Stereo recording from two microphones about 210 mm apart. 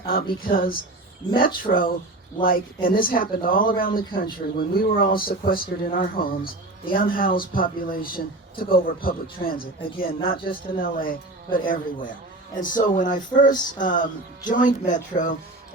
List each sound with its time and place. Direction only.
0.0 s speech: 45° left (ahead or behind)